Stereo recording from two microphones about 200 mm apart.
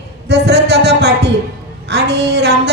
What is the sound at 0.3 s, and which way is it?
Music, 55° right (ahead or behind).